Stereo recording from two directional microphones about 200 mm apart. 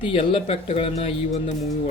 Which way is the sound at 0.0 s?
25° left (ahead or behind).